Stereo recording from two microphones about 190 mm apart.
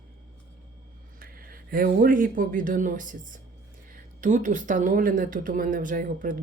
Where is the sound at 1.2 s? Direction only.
50° right (ahead or behind).